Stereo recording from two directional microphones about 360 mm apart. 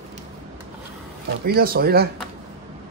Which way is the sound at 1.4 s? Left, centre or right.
Right.